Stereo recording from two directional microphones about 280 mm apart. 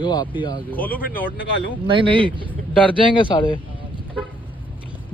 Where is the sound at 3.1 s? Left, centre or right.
Centre.